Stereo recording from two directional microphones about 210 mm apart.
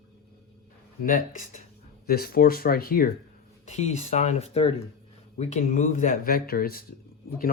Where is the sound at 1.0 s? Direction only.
40° left (ahead or behind).